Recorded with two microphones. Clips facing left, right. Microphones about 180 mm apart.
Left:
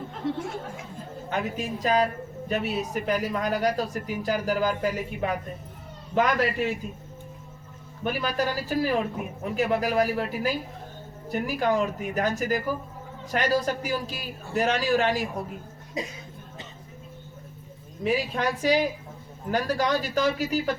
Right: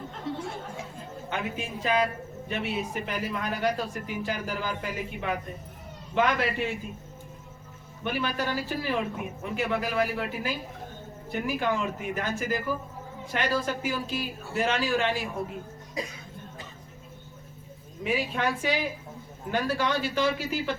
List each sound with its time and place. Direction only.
1.3 s a man's voice: 40° left (ahead or behind)
8.0 s a man's voice: 40° left (ahead or behind)
16.0 s speech: 20° left (ahead or behind)
18.0 s a man's voice: 40° left (ahead or behind)